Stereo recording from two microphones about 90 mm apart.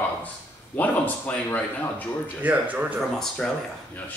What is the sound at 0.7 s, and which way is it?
Speech, 20° left (ahead or behind).